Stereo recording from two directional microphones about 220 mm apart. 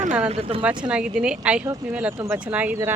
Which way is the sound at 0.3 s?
25° right (ahead or behind).